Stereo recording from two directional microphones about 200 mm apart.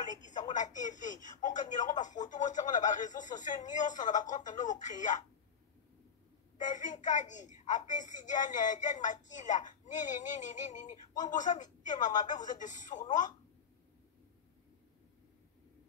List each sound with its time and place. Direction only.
0.0 s a woman's voice: 40° left (ahead or behind)
6.6 s a woman's voice: 40° left (ahead or behind)